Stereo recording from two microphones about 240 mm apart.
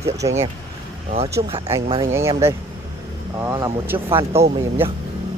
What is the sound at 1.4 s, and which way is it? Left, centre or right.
Speech, right.